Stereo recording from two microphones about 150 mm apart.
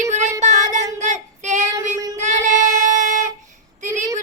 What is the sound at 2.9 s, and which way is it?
Music, 55° right (ahead or behind).